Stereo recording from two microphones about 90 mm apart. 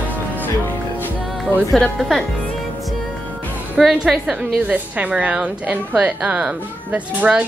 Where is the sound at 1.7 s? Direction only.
5° left (ahead or behind).